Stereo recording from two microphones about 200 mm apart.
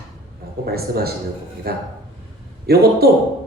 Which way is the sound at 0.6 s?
50° right (ahead or behind).